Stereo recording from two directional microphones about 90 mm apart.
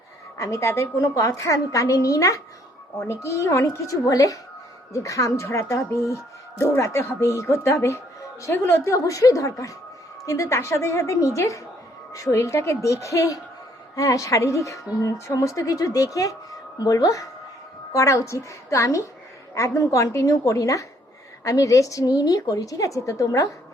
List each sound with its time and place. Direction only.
0.3 s speech: 35° left (ahead or behind)